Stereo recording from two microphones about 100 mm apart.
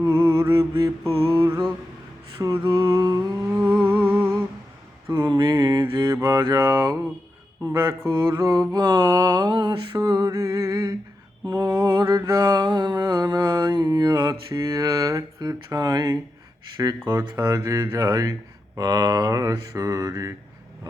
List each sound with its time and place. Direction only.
0.2 s mantra: 50° right (ahead or behind)
0.4 s mantra: 35° right (ahead or behind)
1.0 s mantra: 20° left (ahead or behind)
2.4 s a sound: 35° right (ahead or behind)
3.6 s humming: 15° right (ahead or behind)
5.2 s mantra: 45° right (ahead or behind)
6.1 s a sound: 35° right (ahead or behind)
6.4 s mantra: 35° right (ahead or behind)
17.1 s speech: 45° right (ahead or behind)
17.3 s mantra: 30° right (ahead or behind)